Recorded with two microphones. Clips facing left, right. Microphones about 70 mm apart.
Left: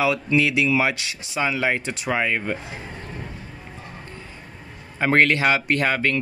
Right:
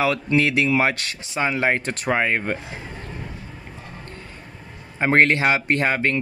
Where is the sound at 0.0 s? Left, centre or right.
Right.